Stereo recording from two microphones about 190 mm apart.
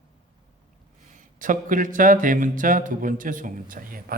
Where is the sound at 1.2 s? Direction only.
45° right (ahead or behind).